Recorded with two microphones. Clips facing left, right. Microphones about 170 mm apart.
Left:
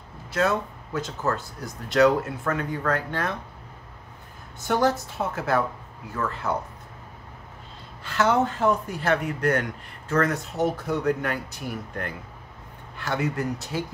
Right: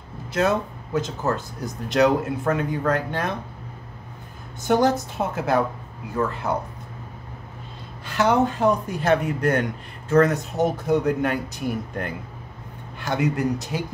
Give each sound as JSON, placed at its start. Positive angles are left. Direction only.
{"t": 0.3, "sound": "speech", "side_deg": -20}
{"t": 4.6, "sound": "speech", "side_deg": -20}
{"t": 8.0, "sound": "speech", "side_deg": -15}